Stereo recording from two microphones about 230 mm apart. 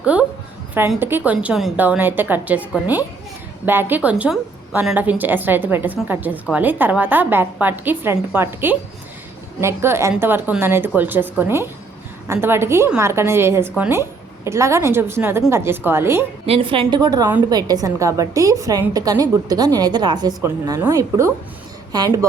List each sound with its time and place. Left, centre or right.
0.0 s a woman's voice: centre
16.5 s a woman's voice: right